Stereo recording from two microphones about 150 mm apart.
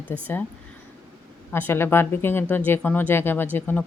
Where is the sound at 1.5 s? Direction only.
15° left (ahead or behind).